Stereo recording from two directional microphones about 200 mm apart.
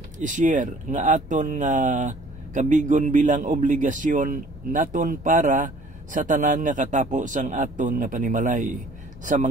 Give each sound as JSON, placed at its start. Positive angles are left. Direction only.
{"t": 0.2, "sound": "speech", "side_deg": -40}